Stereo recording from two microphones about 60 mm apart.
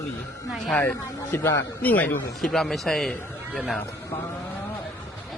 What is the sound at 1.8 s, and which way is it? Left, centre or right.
Speech, left.